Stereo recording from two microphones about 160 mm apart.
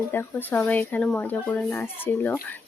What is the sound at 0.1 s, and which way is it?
Speech, 10° left (ahead or behind).